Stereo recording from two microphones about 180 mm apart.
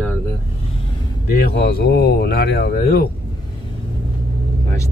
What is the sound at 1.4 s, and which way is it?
Speech, 60° left (ahead or behind).